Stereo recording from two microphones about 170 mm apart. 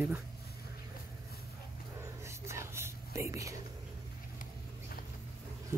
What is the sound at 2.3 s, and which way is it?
Whispering, 15° right (ahead or behind).